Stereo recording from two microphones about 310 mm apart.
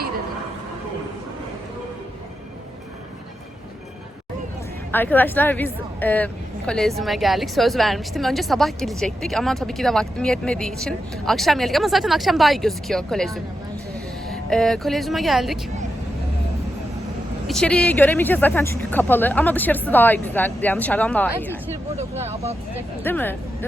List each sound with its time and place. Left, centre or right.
4.9 s a woman's voice: centre
17.4 s a woman's voice: centre
21.9 s speech: right
23.0 s speech: centre